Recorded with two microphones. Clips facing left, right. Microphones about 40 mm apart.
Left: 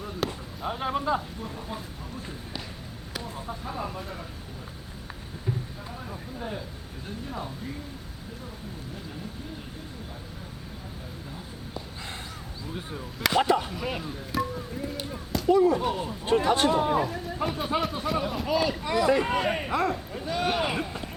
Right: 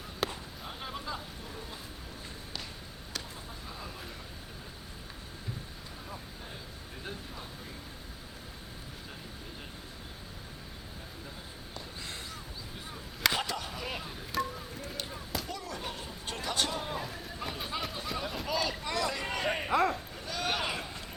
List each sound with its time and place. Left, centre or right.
0.2 s basketball bounce: centre
0.6 s speech: left
3.7 s speech: left
13.4 s speech: left
13.7 s a man's voice: centre
15.4 s speech: left
17.0 s a man's voice: centre
19.5 s speech: centre
20.1 s a sound: centre
20.5 s speech: centre